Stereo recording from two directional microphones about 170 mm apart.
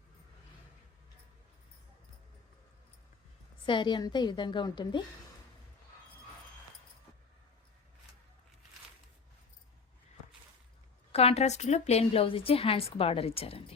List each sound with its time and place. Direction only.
3.7 s a woman's voice: 25° left (ahead or behind)
11.1 s a woman's voice: 35° left (ahead or behind)